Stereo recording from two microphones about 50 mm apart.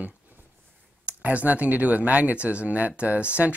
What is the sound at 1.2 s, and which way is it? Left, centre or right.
Speech, right.